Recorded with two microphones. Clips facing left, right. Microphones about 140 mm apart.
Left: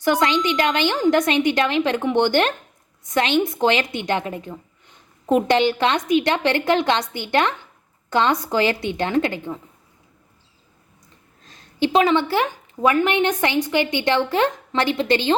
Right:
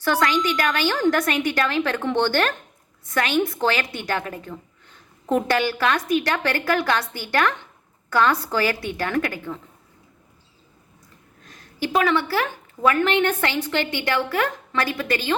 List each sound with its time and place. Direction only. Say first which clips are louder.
0.0 s a woman's voice: left 2 dB; 20° left (ahead or behind)
11.4 s a woman's voice: left 6 dB; 25° left (ahead or behind)